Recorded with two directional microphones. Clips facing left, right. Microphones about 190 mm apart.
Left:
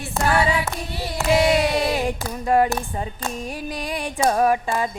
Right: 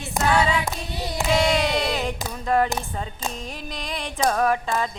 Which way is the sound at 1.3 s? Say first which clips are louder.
Left 3 dB; 10° left (ahead or behind).